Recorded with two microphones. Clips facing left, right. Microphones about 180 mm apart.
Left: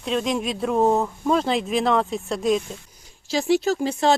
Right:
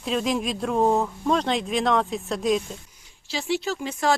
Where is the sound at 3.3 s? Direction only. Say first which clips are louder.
Left 6 dB; 45° left (ahead or behind).